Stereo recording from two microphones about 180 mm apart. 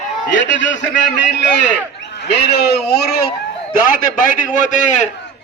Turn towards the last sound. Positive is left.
turn(degrees=40)  # may be behind; listen again after turning